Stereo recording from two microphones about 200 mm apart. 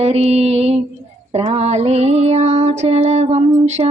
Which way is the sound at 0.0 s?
30° right (ahead or behind).